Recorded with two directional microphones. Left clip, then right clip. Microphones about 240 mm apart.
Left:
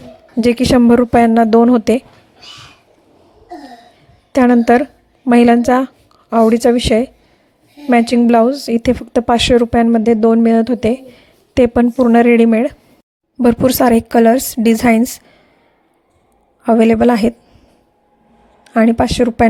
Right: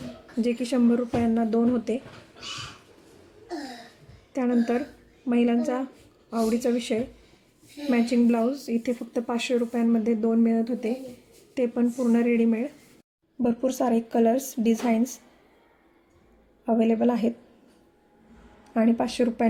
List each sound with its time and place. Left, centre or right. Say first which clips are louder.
0.4 s speech: left 14 dB; left
4.3 s a woman's voice: left 15 dB; left
16.6 s a woman's voice: left 13 dB; left
18.6 s speech: left 12 dB; left